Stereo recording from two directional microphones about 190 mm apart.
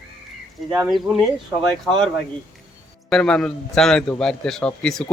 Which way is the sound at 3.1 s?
5° left (ahead or behind).